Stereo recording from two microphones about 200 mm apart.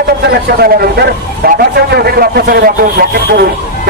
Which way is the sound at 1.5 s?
50° right (ahead or behind).